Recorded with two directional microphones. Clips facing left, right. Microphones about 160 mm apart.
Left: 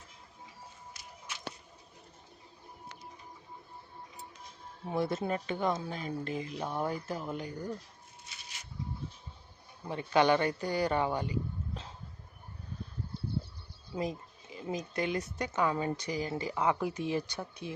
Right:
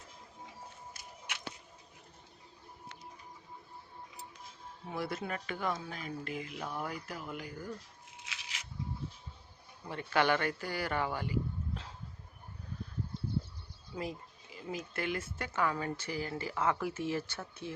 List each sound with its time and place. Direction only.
4.9 s speech: 25° left (ahead or behind)
8.2 s a sound: 90° right
9.9 s speech: 20° left (ahead or behind)
13.9 s speech: 20° left (ahead or behind)